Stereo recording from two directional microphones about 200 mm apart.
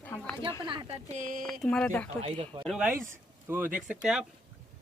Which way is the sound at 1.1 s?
40° right (ahead or behind).